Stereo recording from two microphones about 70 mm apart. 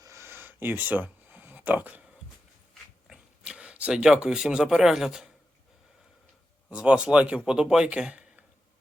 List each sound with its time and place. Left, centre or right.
0.0 s a sound: right
3.1 s speech: centre
6.7 s a man's voice: centre